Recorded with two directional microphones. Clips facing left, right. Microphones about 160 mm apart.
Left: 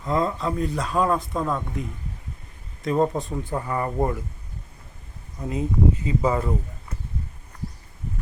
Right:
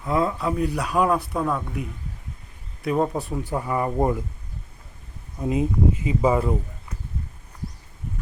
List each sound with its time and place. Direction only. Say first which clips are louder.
0.0 s speech: right 1 dB; 5° right (ahead or behind)
5.4 s speech: right 2 dB; 20° right (ahead or behind)